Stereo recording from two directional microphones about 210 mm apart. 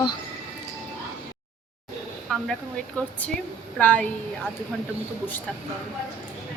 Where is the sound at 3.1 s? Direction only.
5° left (ahead or behind).